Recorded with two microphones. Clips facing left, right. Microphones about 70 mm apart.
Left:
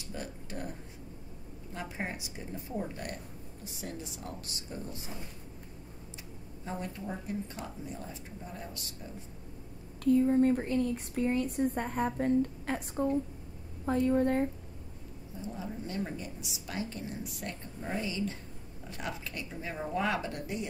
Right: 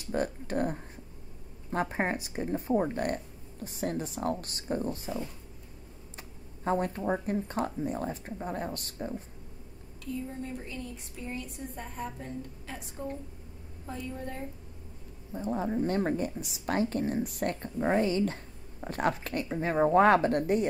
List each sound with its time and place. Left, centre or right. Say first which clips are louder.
0.0 s a sound: right 10 dB; right
1.7 s a woman's voice: right 9 dB; right
6.6 s a woman's voice: right 10 dB; right
10.0 s speech: left 13 dB; left
13.8 s speech: left 11 dB; left
15.3 s a woman's voice: right 10 dB; right